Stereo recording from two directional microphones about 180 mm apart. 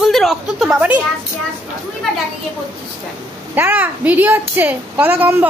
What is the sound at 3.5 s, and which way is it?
A woman's voice, 10° right (ahead or behind).